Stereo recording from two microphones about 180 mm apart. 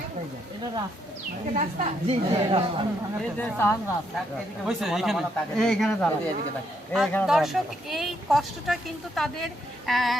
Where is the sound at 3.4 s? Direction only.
10° left (ahead or behind).